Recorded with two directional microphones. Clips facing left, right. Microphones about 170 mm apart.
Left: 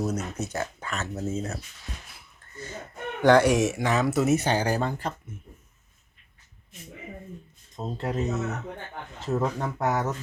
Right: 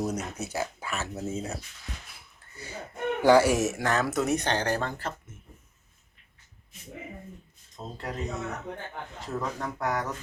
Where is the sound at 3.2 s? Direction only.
5° right (ahead or behind); by 5.1 s 10° left (ahead or behind).